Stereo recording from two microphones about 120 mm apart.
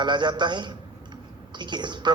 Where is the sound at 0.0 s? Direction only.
40° right (ahead or behind).